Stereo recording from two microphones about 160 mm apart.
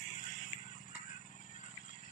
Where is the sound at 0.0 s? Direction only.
55° left (ahead or behind).